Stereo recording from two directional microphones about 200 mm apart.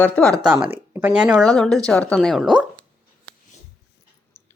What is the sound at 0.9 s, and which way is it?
A woman's voice, 10° right (ahead or behind).